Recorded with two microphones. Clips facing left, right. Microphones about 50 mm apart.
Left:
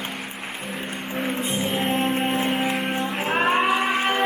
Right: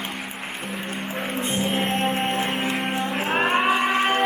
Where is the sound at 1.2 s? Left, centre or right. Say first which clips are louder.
Left 1 dB; centre.